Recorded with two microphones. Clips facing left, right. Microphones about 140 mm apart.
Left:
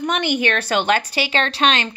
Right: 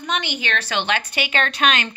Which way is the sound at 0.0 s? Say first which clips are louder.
Left 6 dB; 55° left (ahead or behind).